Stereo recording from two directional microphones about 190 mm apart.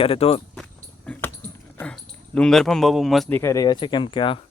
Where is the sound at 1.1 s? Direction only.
10° left (ahead or behind).